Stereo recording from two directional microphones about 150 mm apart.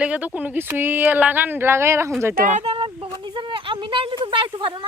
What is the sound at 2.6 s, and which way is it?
Speech, 40° right (ahead or behind).